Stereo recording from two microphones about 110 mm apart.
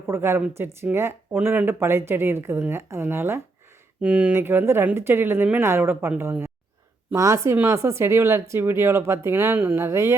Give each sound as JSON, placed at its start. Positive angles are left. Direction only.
{"t": 0.1, "sound": "speech", "side_deg": -20}
{"t": 4.4, "sound": "speech", "side_deg": -20}